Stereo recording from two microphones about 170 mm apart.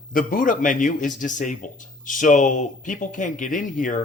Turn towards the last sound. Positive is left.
turn(degrees=50)  # may be behind; listen again after turning